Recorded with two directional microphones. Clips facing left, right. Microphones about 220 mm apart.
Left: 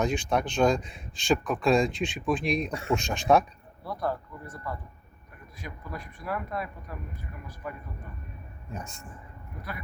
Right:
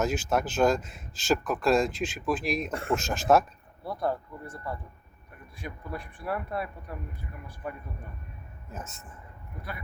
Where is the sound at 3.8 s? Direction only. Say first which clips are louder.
Right 1 dB; 25° right (ahead or behind).